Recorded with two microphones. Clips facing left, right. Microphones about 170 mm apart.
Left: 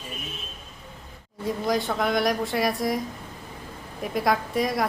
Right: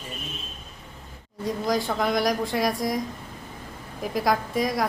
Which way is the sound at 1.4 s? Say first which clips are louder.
Even; centre (ahead or behind).